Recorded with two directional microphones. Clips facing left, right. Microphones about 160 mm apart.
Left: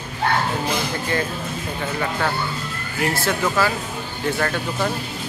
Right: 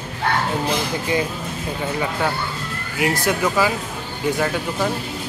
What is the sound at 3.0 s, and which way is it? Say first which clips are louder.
Speech: right 2 dB; 15° right (ahead or behind).